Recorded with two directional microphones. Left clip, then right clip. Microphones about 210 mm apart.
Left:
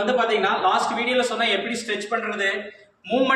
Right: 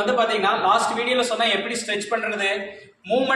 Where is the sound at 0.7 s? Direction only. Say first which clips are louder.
Right 1 dB; 10° right (ahead or behind).